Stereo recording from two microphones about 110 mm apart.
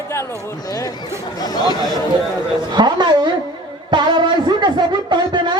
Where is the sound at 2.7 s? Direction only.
45° right (ahead or behind).